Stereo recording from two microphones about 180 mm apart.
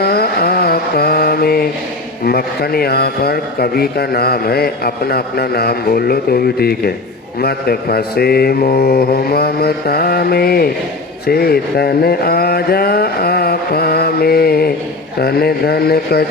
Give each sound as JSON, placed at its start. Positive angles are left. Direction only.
{"t": 0.0, "sound": "mantra", "side_deg": 60}
{"t": 2.2, "sound": "a man's voice", "side_deg": 60}
{"t": 11.3, "sound": "a sound", "side_deg": 60}
{"t": 15.2, "sound": "a man's voice", "side_deg": 60}